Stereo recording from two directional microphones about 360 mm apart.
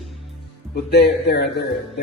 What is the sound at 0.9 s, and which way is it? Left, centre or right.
Speech, left.